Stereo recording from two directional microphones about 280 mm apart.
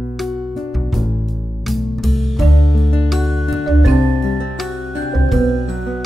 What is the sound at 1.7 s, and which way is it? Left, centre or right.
Music, centre.